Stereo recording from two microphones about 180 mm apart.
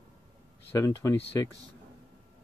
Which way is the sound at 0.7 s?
20° left (ahead or behind).